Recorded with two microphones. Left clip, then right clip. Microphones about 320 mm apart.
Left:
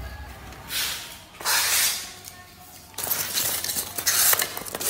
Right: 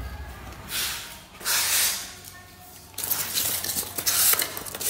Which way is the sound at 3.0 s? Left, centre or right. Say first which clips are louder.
Left 1 dB; centre.